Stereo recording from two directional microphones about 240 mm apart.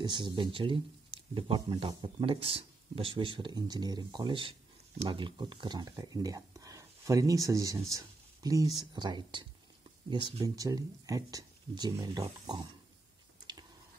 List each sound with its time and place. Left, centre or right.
0.0 s speech: centre